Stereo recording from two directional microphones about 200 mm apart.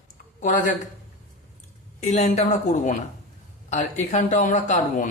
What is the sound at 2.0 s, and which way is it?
A man's voice, 35° left (ahead or behind).